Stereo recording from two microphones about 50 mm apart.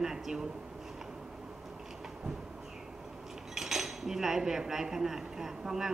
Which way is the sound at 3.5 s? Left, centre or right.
Centre.